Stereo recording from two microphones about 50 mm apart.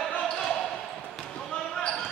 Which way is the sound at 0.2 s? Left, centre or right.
Centre.